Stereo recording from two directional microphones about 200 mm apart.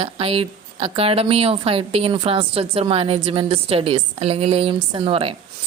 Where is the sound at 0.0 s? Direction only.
30° right (ahead or behind).